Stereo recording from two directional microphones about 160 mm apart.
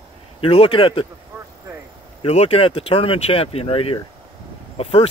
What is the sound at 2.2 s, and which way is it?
Speech, 40° left (ahead or behind).